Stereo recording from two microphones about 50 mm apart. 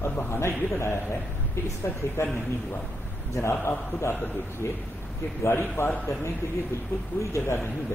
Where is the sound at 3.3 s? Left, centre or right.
Left.